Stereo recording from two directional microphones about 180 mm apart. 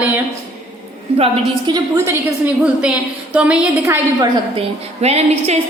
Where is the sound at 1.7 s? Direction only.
25° right (ahead or behind).